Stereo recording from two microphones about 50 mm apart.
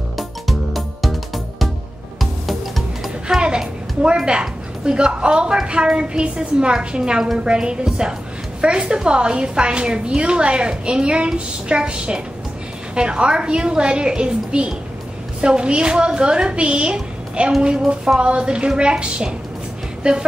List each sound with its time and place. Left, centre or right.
0.2 s music: centre
3.3 s a sound: centre
5.7 s a woman's voice: centre